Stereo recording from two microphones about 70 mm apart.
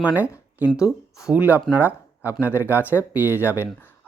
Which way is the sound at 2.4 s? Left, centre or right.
Right.